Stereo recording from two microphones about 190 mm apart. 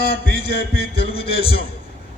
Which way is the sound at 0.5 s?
55° left (ahead or behind).